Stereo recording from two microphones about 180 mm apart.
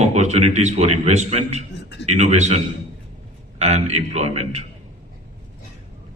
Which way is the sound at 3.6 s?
40° right (ahead or behind).